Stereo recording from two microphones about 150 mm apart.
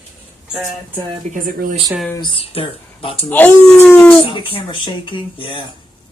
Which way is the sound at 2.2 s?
35° left (ahead or behind).